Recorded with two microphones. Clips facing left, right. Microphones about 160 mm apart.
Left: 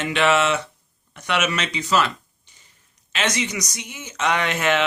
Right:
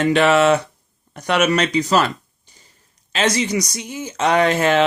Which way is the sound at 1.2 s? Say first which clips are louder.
Right 6 dB; 40° right (ahead or behind).